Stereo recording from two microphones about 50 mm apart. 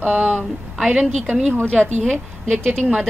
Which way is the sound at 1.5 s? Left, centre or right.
Left.